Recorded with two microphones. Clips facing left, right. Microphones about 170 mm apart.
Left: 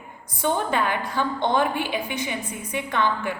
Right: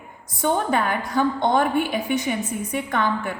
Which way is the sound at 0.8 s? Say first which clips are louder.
Right 3 dB; 45° right (ahead or behind).